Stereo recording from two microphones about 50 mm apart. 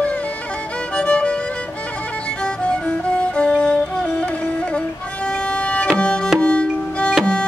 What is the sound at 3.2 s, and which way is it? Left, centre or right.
Music, left.